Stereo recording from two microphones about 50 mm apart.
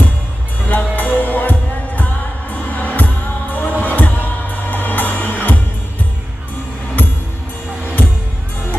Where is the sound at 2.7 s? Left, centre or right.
Left.